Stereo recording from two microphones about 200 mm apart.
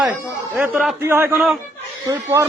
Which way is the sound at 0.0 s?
10° right (ahead or behind).